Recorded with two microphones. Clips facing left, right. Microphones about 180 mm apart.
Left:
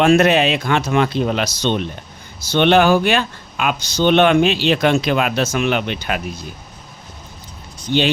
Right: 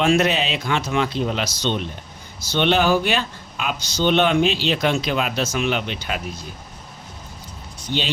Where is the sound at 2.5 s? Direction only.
65° left (ahead or behind).